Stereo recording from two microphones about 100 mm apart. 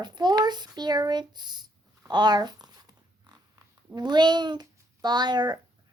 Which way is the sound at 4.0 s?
45° right (ahead or behind).